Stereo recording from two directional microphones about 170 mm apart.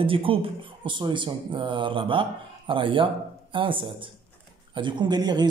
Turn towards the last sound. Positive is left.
turn(degrees=-25)  # may be behind; listen again after turning